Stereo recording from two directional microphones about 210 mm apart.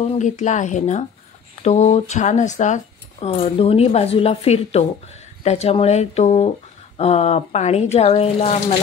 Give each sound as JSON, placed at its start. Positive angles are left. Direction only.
{"t": 0.1, "sound": "speech", "side_deg": 35}